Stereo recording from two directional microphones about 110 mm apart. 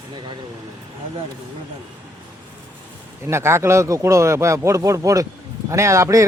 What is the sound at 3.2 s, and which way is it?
A man's voice, 25° right (ahead or behind).